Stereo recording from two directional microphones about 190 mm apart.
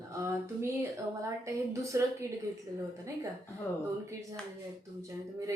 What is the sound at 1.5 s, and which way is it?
Speech, 15° right (ahead or behind).